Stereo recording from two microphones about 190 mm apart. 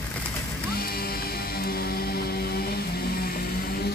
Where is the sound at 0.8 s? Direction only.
55° left (ahead or behind).